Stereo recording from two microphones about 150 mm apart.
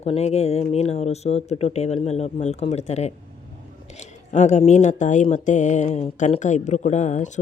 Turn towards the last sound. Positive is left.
turn(degrees=50)  # may be behind; listen again after turning